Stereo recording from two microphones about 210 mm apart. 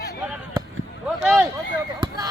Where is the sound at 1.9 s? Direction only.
20° right (ahead or behind).